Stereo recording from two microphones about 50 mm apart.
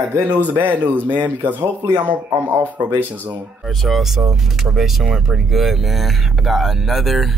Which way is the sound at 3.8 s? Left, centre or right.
Centre.